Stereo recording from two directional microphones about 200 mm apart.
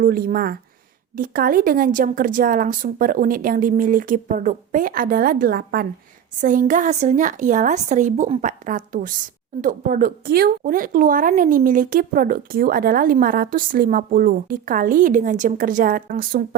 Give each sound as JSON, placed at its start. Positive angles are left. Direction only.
{"t": 0.0, "sound": "a woman's voice", "side_deg": -45}